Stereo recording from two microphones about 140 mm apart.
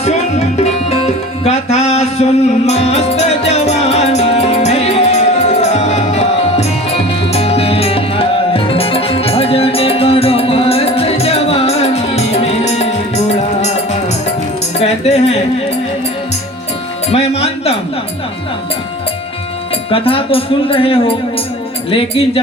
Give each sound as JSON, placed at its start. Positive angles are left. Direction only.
{"t": 0.0, "sound": "music", "side_deg": 50}
{"t": 14.8, "sound": "music", "side_deg": 50}
{"t": 17.1, "sound": "music", "side_deg": 45}
{"t": 19.9, "sound": "speech", "side_deg": 40}